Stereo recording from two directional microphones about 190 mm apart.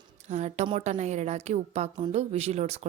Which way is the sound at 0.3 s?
35° right (ahead or behind).